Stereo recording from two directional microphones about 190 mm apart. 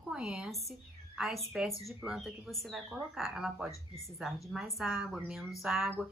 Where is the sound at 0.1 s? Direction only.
5° right (ahead or behind).